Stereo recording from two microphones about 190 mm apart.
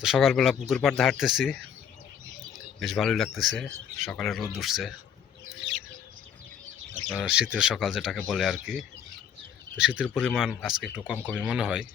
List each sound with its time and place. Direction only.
0.0 s speech: centre (ahead or behind)
2.8 s speech: centre (ahead or behind)
7.1 s speech: 5° right (ahead or behind)